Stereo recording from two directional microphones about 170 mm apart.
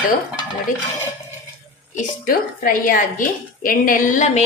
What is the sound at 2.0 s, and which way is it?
A woman's voice, 55° left (ahead or behind).